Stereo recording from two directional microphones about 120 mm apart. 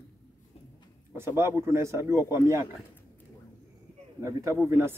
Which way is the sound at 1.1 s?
20° right (ahead or behind).